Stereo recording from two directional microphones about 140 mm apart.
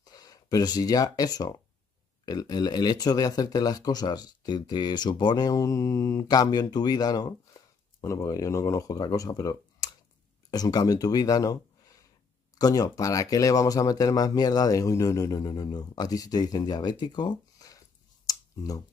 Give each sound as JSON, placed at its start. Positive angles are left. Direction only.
{"t": 0.0, "sound": "speech", "side_deg": 25}